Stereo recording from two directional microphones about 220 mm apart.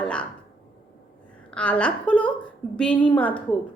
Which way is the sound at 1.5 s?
5° left (ahead or behind).